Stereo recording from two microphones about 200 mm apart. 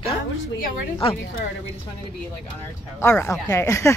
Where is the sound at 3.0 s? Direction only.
15° left (ahead or behind).